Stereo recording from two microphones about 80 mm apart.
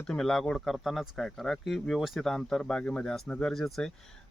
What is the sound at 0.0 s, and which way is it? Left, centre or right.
Speech, centre.